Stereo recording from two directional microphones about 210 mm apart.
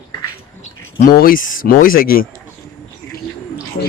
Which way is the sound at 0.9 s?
40° left (ahead or behind).